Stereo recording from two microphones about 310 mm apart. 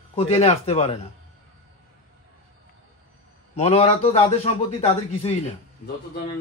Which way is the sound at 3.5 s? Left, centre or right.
Centre.